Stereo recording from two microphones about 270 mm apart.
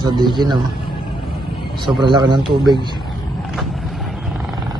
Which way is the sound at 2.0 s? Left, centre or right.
Centre.